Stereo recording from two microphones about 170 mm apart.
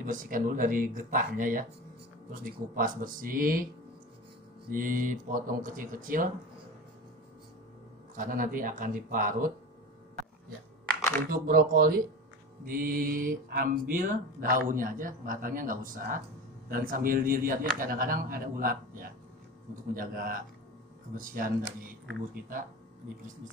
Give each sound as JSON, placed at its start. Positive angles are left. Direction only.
{"t": 0.0, "sound": "speech", "side_deg": -50}
{"t": 4.6, "sound": "speech", "side_deg": -55}
{"t": 8.2, "sound": "speech", "side_deg": -55}
{"t": 11.2, "sound": "speech", "side_deg": -60}